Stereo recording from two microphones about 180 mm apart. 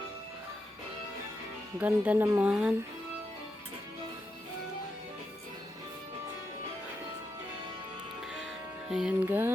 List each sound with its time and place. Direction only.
1.8 s speech: 10° right (ahead or behind)
8.9 s speech: 5° right (ahead or behind)